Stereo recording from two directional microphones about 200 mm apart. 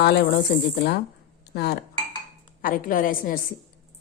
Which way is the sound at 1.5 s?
55° left (ahead or behind).